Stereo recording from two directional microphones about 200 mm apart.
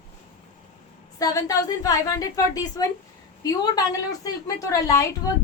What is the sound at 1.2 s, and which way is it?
A woman's voice, 15° left (ahead or behind).